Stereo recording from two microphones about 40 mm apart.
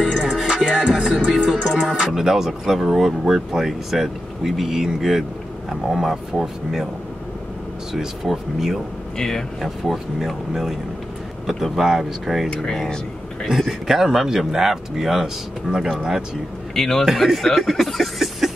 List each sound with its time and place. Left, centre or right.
0.1 s music: centre
0.7 s music: right
1.3 s speech: centre
7.9 s speech: centre
13.5 s speech: centre
15.7 s speech: centre
16.0 s speech: centre
16.7 s a man's voice: centre
17.0 s speech: centre
17.4 s speech: centre